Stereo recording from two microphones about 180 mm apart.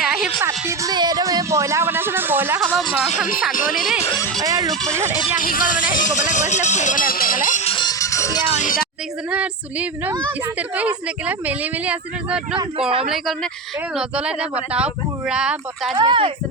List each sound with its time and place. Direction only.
0.0 s a sound: 5° right (ahead or behind)
0.4 s speech: 15° right (ahead or behind)
2.6 s a sound: centre (ahead or behind)
3.1 s speech: 50° left (ahead or behind)
4.4 s speech: 20° right (ahead or behind)
4.7 s music: 5° left (ahead or behind)
4.9 s speech: 10° right (ahead or behind)
5.4 s speech: 50° left (ahead or behind)
7.6 s music: 30° left (ahead or behind)
8.5 s a sound: 50° left (ahead or behind)
9.3 s speech: 5° right (ahead or behind)
16.0 s speech: 25° right (ahead or behind)